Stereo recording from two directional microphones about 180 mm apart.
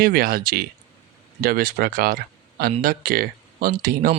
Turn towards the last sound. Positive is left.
turn(degrees=-55)  # may be behind; listen again after turning